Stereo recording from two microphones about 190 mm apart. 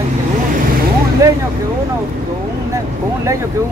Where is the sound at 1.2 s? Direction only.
15° right (ahead or behind).